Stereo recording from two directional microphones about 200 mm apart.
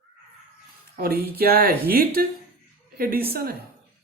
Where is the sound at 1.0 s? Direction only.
50° right (ahead or behind).